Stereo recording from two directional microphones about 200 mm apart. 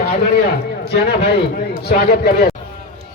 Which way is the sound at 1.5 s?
50° left (ahead or behind).